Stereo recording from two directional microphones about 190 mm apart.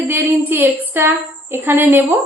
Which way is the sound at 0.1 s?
10° right (ahead or behind).